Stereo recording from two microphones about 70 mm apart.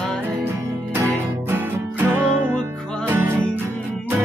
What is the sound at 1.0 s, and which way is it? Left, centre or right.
Music, right.